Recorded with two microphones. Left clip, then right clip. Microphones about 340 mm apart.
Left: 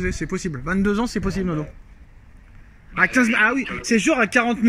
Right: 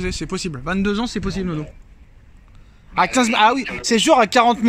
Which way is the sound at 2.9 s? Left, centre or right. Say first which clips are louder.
Right 1 dB; centre.